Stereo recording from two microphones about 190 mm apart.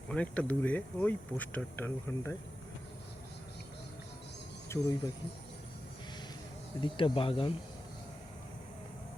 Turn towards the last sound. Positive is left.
turn(degrees=25)  # may be behind; listen again after turning